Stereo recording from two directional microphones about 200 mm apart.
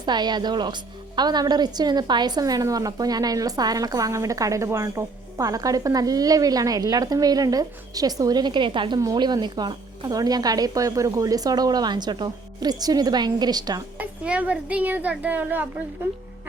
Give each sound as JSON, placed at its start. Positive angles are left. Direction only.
{"t": 0.0, "sound": "a woman's voice", "side_deg": -20}
{"t": 14.0, "sound": "a woman's voice", "side_deg": -5}